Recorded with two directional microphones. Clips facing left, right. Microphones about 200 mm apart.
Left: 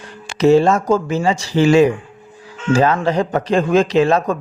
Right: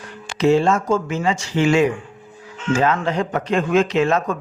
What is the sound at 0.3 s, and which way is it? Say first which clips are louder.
Speech: left 4 dB; 40° left (ahead or behind).